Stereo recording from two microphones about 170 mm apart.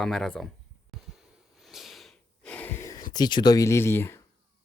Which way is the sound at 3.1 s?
25° left (ahead or behind).